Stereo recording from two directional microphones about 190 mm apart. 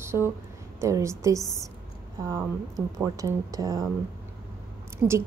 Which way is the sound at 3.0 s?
15° right (ahead or behind).